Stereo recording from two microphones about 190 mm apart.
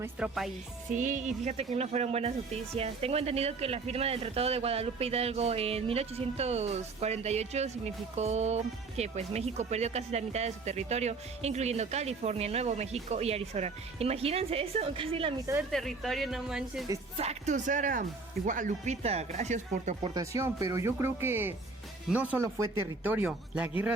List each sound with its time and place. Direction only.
0.0 s speech: 5° right (ahead or behind)
0.9 s speech: 40° right (ahead or behind)
15.7 s speech: centre (ahead or behind)
17.2 s speech: 35° right (ahead or behind)
20.1 s speech: 15° right (ahead or behind)